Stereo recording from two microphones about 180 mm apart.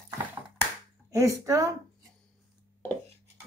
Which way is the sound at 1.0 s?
15° right (ahead or behind).